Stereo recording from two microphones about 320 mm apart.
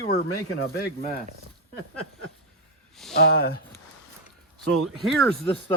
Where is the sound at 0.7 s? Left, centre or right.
Left.